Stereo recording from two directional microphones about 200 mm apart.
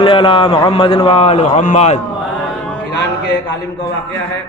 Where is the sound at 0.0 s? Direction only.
25° left (ahead or behind).